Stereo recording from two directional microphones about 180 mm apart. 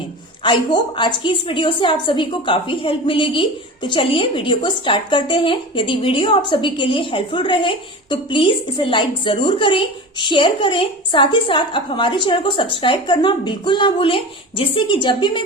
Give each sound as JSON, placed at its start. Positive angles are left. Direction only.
{"t": 0.4, "sound": "speech", "side_deg": 25}